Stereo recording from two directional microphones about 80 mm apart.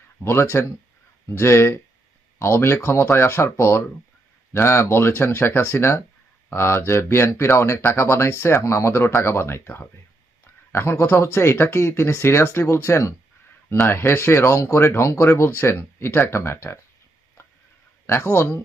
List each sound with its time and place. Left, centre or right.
0.2 s speech: left
18.0 s speech: left